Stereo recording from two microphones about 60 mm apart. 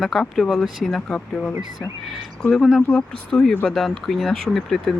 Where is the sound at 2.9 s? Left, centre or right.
Centre.